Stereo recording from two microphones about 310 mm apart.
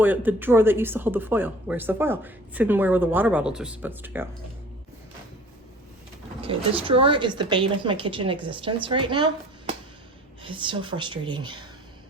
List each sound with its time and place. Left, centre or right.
0.0 s speech: centre
6.4 s speech: centre